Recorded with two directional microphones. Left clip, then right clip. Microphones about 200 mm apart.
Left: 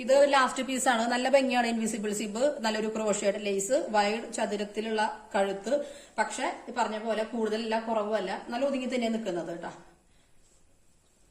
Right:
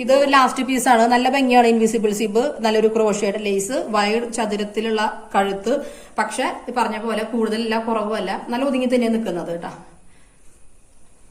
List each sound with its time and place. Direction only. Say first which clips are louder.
0.0 s a woman's voice: right 8 dB; 50° left (ahead or behind)
1.8 s a woman's voice: right 14 dB; 40° left (ahead or behind)
6.7 s a woman's voice: right 8 dB; 50° left (ahead or behind)